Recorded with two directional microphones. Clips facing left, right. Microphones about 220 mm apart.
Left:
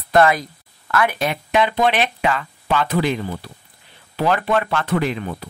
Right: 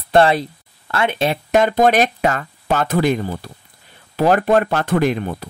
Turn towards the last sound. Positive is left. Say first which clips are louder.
# right 4 dB
turn(degrees=-45)  # may be behind; listen again after turning